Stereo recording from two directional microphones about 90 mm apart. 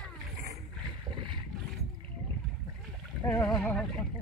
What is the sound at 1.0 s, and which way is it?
Boat, 70° right (ahead or behind).